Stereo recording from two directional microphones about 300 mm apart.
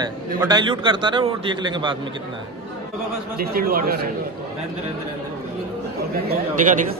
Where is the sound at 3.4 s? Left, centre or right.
Right.